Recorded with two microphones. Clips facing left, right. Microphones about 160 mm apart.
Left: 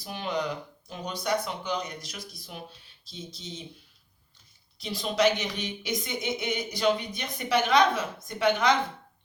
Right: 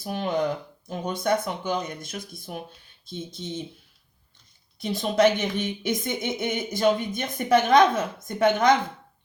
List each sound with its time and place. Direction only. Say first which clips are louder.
0.0 s speech: right 5 dB; 50° right (ahead or behind)
4.8 s speech: right 5 dB; 50° right (ahead or behind)